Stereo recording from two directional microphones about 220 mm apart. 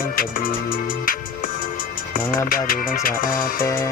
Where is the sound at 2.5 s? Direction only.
40° left (ahead or behind).